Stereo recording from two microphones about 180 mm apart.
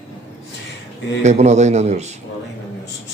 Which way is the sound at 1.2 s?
40° right (ahead or behind).